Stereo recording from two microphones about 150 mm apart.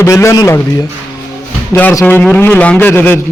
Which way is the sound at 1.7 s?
10° left (ahead or behind).